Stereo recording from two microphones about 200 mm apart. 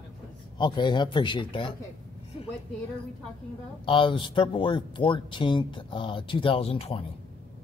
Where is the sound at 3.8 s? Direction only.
25° left (ahead or behind).